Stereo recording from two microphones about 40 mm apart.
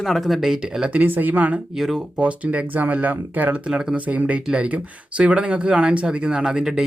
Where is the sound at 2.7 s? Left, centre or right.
Right.